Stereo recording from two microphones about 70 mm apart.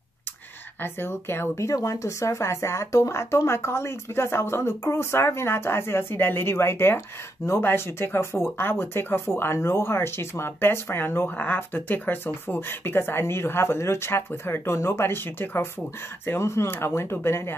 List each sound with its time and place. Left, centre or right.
0.8 s speech: left